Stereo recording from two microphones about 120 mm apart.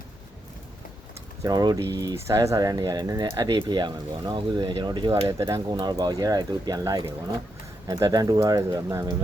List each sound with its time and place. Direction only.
1.4 s speech: 35° right (ahead or behind)
2.1 s speech: 25° right (ahead or behind)